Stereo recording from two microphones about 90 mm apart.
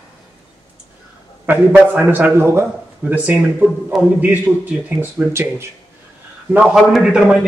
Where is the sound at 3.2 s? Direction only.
15° right (ahead or behind).